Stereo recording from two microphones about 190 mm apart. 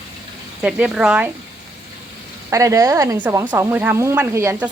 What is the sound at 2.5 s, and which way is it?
Speech, 15° right (ahead or behind).